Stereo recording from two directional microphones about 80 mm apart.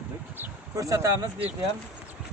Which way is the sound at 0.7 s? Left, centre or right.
Right.